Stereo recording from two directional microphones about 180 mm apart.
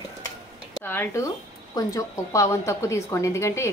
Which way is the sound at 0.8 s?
10° left (ahead or behind).